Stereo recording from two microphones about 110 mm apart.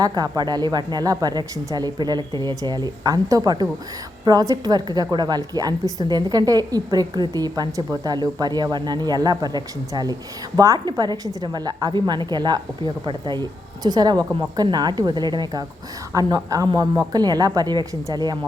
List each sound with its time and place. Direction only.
0.0 s a woman's voice: 35° right (ahead or behind)